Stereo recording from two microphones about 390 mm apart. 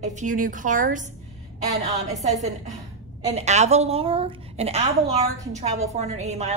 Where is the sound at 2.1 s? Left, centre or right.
Centre.